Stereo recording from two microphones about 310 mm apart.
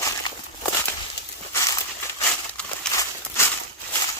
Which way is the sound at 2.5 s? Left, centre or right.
Centre.